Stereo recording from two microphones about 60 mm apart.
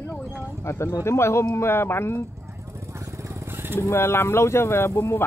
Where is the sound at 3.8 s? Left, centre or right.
Left.